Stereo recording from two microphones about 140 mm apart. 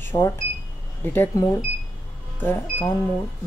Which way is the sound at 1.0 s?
15° left (ahead or behind).